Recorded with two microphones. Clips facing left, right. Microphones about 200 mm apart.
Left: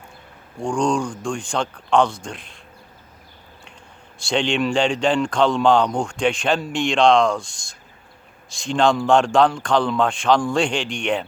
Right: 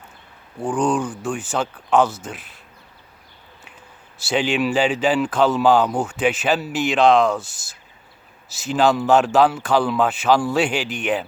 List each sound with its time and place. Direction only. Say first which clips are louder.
0.6 s speech: even; 5° right (ahead or behind)
4.2 s speech: even; 5° right (ahead or behind)